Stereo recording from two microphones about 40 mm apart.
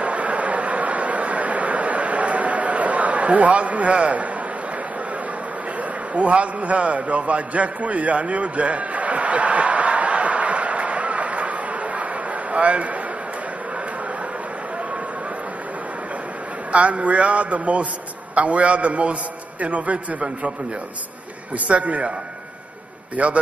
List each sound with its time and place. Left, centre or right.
0.0 s vehicle: right
5.8 s a sound: right
16.7 s a man's voice: right
21.5 s a man's voice: right
23.2 s a man's voice: right